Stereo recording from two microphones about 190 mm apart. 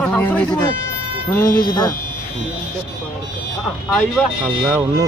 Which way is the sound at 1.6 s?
25° left (ahead or behind).